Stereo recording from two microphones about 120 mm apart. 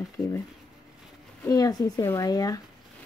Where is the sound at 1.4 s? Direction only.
30° left (ahead or behind).